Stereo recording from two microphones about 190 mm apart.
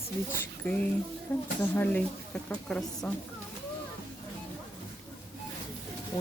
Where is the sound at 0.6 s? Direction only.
10° left (ahead or behind).